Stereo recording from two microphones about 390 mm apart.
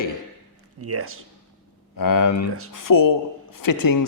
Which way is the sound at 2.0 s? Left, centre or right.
Left.